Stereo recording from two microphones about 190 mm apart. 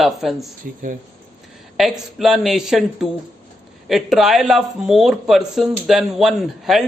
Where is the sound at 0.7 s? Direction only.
50° right (ahead or behind).